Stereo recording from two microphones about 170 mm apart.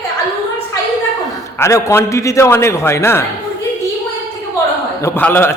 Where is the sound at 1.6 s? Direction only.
15° left (ahead or behind).